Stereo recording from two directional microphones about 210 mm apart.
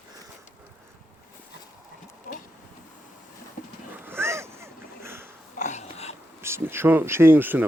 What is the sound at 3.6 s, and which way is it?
Horse, 40° left (ahead or behind).